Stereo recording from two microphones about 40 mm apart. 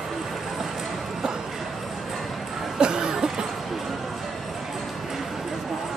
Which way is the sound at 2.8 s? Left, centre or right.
Centre.